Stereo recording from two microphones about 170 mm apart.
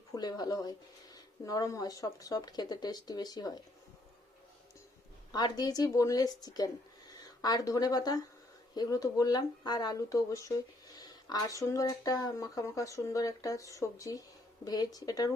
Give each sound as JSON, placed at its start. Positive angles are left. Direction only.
{"t": 0.1, "sound": "speech", "side_deg": 25}
{"t": 5.3, "sound": "speech", "side_deg": 25}